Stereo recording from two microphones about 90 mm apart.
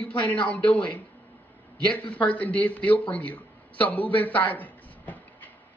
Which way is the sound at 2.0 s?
15° left (ahead or behind).